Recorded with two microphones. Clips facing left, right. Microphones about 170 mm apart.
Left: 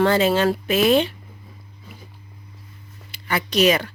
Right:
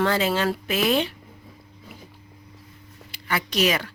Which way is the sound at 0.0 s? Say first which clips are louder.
Left 5 dB; 25° left (ahead or behind).